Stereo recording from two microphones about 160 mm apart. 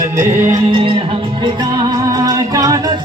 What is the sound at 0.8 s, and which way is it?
Music, 35° right (ahead or behind).